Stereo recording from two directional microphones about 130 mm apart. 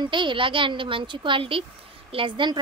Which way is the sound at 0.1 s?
40° right (ahead or behind).